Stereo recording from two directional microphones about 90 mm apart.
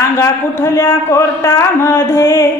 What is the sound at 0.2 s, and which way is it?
A woman's voice, 30° left (ahead or behind).